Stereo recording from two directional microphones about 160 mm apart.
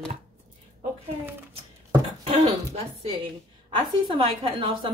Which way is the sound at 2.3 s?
40° right (ahead or behind).